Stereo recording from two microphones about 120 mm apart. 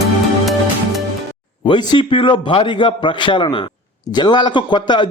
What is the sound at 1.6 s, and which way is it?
A man's voice, 40° left (ahead or behind).